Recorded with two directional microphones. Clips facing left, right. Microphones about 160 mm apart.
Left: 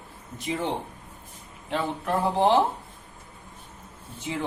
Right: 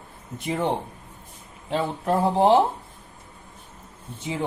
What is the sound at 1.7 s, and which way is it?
Speech, 35° right (ahead or behind).